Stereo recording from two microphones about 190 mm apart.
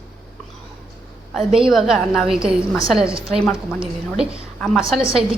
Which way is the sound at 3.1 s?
30° right (ahead or behind).